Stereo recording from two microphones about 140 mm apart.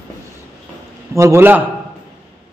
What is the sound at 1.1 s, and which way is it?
Speech, 20° right (ahead or behind).